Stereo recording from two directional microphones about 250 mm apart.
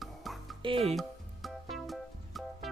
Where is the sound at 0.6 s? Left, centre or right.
Right.